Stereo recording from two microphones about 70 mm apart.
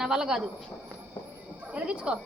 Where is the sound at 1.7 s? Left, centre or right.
Centre.